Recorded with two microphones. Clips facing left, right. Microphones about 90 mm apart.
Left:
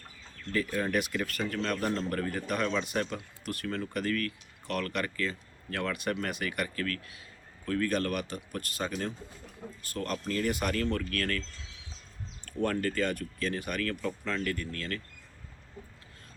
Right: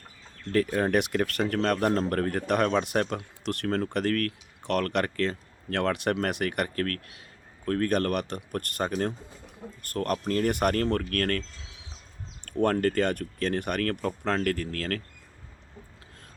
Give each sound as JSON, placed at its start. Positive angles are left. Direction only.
{"t": 0.7, "sound": "speech", "side_deg": -55}
{"t": 12.5, "sound": "speech", "side_deg": -60}